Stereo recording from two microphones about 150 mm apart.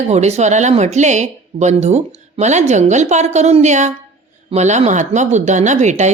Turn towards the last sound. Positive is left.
turn(degrees=-50)  # may be behind; listen again after turning